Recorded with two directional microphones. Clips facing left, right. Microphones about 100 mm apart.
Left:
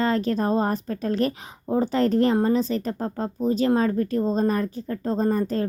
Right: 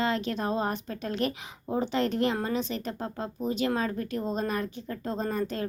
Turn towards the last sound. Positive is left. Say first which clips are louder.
# left 7 dB
turn(degrees=40)  # may be behind; listen again after turning